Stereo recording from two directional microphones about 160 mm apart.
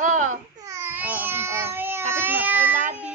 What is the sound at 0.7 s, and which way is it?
Babbling, 15° right (ahead or behind).